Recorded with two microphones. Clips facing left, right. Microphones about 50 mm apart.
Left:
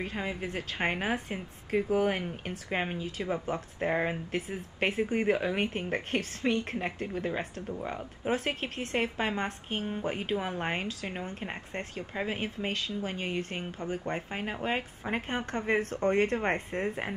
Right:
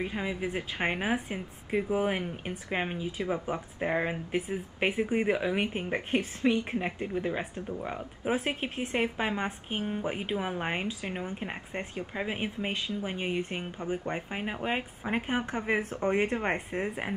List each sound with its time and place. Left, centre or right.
0.0 s speech: centre
0.5 s speech: centre
0.8 s speech: centre
2.2 s speech: centre
3.2 s speech: centre